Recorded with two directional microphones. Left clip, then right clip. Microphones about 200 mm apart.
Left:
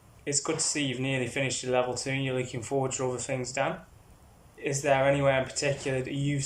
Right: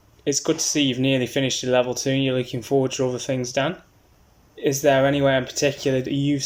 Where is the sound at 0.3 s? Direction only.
30° right (ahead or behind).